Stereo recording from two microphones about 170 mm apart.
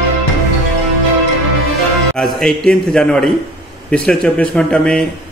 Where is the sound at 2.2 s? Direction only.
5° left (ahead or behind).